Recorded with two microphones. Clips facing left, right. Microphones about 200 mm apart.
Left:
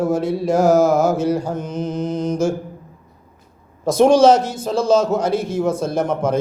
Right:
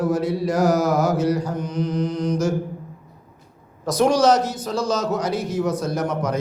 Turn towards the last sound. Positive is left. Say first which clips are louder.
# left 4 dB
turn(degrees=25)  # may be behind; listen again after turning